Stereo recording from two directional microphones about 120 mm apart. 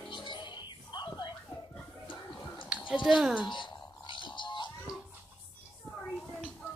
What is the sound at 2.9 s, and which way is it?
Speech, 5° right (ahead or behind).